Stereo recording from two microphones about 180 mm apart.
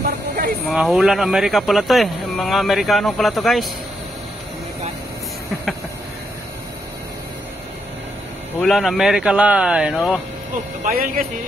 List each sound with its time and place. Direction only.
0.7 s speech: centre (ahead or behind)
8.5 s speech: centre (ahead or behind)
10.9 s speech: 55° right (ahead or behind)